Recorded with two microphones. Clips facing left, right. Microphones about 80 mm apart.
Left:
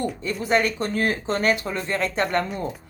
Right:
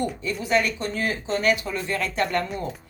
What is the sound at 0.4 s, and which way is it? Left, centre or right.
Speech, left.